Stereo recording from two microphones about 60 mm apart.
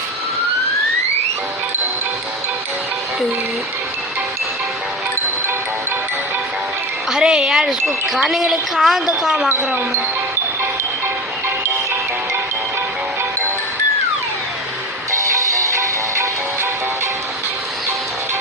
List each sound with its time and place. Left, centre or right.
7.1 s a woman's voice: centre
9.5 s speech: right
11.4 s music: right
15.1 s music: right